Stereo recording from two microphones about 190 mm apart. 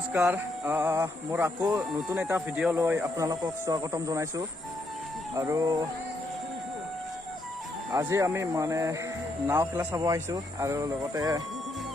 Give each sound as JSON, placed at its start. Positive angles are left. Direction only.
{"t": 0.1, "sound": "speech", "side_deg": -10}
{"t": 2.1, "sound": "speech", "side_deg": -5}
{"t": 7.9, "sound": "speech", "side_deg": -15}